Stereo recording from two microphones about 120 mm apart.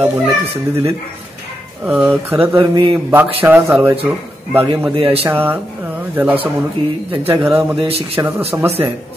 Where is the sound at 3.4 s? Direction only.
15° right (ahead or behind).